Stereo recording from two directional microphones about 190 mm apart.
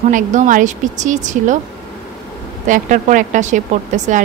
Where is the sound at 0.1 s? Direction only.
40° right (ahead or behind).